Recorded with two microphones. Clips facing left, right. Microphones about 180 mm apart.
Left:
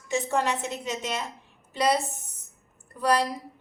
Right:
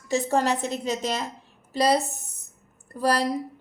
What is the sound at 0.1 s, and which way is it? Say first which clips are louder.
A woman's voice: right 3 dB; 40° right (ahead or behind).